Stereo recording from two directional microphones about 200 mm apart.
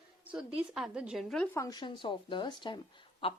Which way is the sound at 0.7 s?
5° right (ahead or behind).